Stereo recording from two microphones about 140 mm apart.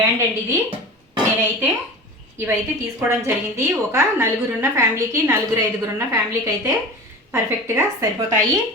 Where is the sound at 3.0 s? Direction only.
20° right (ahead or behind).